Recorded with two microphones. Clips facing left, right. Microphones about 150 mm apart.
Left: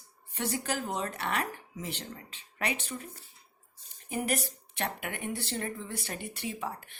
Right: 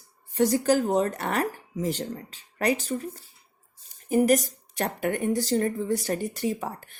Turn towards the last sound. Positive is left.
turn(degrees=-45)  # may be behind; listen again after turning